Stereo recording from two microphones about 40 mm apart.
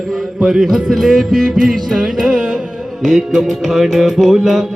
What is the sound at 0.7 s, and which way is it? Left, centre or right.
Music, centre.